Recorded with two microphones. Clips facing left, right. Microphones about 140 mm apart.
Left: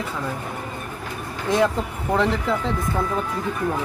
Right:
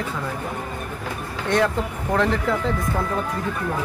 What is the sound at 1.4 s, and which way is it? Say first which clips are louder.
Speech: left 1 dB; 5° left (ahead or behind).